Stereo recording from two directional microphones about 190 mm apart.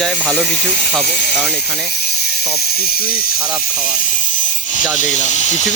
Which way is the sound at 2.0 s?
55° left (ahead or behind).